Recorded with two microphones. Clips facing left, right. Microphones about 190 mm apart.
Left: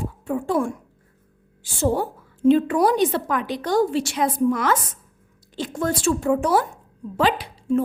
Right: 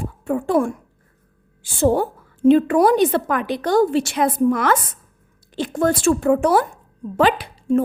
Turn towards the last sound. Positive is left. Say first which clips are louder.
# right 3 dB
turn(degrees=-55)  # may be behind; listen again after turning